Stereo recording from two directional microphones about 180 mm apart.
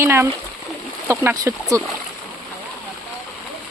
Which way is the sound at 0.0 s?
15° right (ahead or behind).